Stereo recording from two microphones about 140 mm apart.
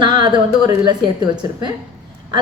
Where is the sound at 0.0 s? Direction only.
35° right (ahead or behind).